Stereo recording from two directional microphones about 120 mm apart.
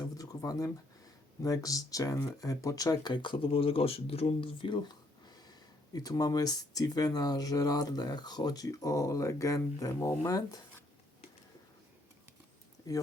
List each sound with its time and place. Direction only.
0.0 s speech: 30° left (ahead or behind)